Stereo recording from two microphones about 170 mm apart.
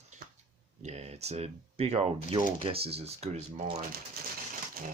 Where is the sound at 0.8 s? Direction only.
40° right (ahead or behind).